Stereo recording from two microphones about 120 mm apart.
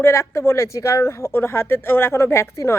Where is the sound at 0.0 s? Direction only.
25° left (ahead or behind).